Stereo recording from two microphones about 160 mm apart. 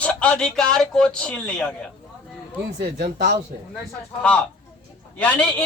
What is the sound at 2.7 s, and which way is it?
Speech, 85° right.